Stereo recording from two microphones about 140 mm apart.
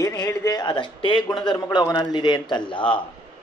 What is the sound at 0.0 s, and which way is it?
A man's voice, 20° left (ahead or behind).